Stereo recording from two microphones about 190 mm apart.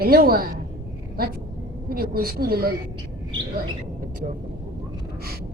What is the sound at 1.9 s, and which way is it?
Child singing, 50° right (ahead or behind).